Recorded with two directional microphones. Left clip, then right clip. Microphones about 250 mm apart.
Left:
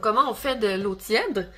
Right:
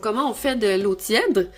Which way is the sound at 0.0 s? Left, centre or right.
Right.